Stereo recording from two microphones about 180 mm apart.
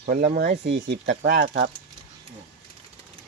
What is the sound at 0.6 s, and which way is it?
Speech, 70° right (ahead or behind).